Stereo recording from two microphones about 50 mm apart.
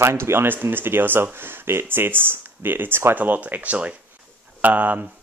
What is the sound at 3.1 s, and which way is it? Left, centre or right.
Speech, right.